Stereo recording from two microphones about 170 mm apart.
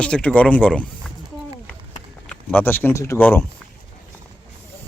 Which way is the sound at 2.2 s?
10° left (ahead or behind).